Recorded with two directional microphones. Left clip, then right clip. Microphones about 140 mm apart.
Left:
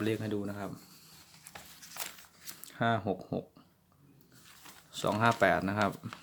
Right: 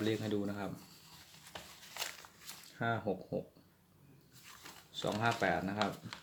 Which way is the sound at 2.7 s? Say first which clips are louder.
Left 5 dB; 50° left (ahead or behind).